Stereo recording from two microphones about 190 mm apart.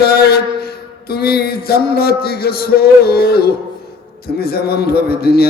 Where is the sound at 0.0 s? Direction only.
55° left (ahead or behind).